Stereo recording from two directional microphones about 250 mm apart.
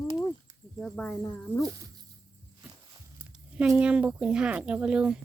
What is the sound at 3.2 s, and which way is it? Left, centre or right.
Speech, centre.